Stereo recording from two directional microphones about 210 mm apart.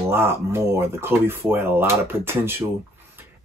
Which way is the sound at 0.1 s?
10° right (ahead or behind).